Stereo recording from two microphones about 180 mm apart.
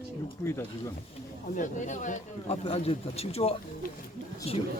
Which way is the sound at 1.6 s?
45° left (ahead or behind).